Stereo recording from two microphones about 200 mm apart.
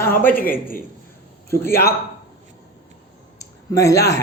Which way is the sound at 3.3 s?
15° left (ahead or behind).